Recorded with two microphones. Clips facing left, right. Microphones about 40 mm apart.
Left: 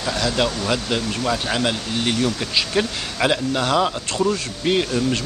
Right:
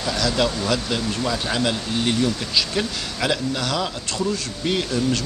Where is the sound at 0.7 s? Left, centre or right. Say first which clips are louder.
Left 1 dB; centre.